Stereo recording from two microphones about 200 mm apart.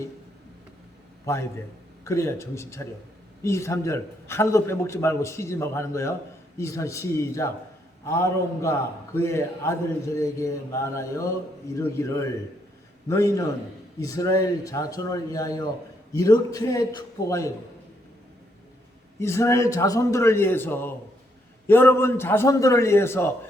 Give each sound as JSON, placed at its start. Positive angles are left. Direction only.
{"t": 1.2, "sound": "a man's voice", "side_deg": 15}
{"t": 19.2, "sound": "a man's voice", "side_deg": 15}